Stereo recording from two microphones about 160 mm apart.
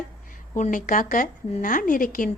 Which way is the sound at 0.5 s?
55° left (ahead or behind).